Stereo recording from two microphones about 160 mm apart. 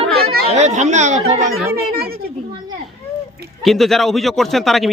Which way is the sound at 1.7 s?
75° right (ahead or behind).